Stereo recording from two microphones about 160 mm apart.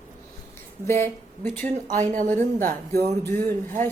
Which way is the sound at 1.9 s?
50° right (ahead or behind).